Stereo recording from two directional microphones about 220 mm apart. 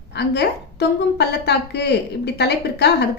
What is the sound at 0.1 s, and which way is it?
A woman's voice, 50° left (ahead or behind).